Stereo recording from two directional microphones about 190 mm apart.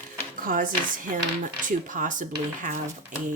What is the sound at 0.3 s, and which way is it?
Speech, 45° right (ahead or behind).